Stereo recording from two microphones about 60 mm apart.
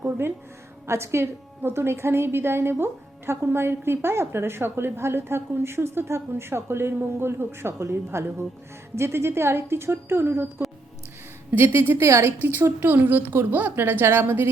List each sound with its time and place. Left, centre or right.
0.9 s a woman's voice: right
11.5 s a woman's voice: right
12.8 s a woman's voice: right